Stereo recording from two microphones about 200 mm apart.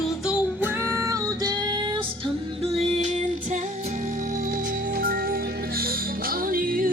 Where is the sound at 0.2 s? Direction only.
5° right (ahead or behind).